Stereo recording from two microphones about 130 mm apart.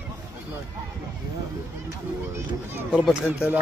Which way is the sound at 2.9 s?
5° right (ahead or behind).